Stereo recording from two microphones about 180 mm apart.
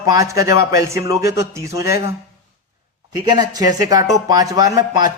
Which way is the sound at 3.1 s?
20° right (ahead or behind).